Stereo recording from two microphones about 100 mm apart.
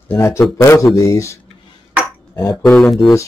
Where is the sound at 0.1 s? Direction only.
25° left (ahead or behind).